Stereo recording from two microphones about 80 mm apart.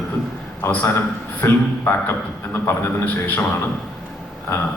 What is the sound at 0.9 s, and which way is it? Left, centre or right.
A man's voice, left.